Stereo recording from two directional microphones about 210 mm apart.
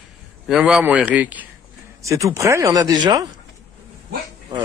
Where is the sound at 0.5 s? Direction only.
5° right (ahead or behind); by 3.3 s 20° right (ahead or behind).